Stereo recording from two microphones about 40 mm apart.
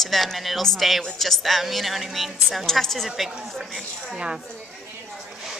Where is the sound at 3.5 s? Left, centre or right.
Centre.